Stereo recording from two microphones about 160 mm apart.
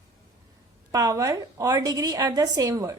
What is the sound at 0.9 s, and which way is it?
A woman's voice, 20° right (ahead or behind).